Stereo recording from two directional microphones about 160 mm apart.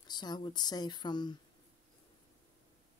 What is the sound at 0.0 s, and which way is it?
Speech, 25° left (ahead or behind).